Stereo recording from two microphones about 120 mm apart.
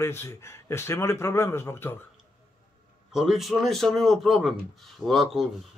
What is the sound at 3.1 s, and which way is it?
Speech, 5° right (ahead or behind).